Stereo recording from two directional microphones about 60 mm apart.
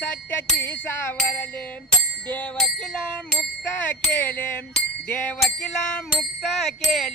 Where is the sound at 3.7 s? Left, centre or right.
Left.